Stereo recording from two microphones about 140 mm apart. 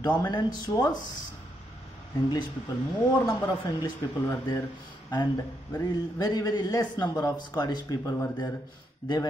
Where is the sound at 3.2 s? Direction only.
20° left (ahead or behind).